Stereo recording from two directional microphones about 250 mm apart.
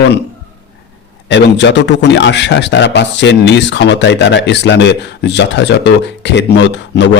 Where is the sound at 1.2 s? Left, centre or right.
Left.